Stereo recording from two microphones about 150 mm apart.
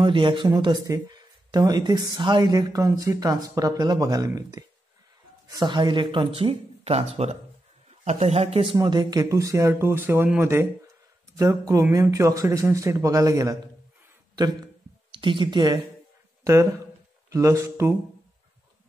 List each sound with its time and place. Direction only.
0.0 s speech: 35° right (ahead or behind)
8.7 s speech: 30° right (ahead or behind)
14.3 s a sound: 25° right (ahead or behind)
17.3 s speech: 20° right (ahead or behind)